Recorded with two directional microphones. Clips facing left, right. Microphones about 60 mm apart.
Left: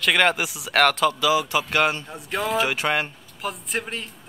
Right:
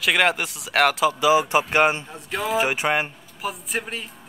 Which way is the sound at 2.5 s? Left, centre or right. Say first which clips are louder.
Right 2 dB; centre.